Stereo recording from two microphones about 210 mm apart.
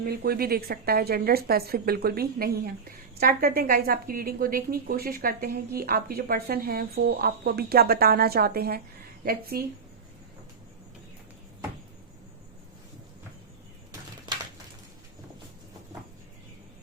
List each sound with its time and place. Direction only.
0.0 s a woman's voice: 50° right (ahead or behind)